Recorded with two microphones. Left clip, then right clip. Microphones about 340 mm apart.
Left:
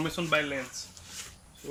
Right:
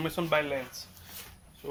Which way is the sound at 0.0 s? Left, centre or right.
Centre.